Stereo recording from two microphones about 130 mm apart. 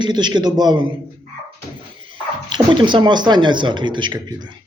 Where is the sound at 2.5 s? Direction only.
35° right (ahead or behind).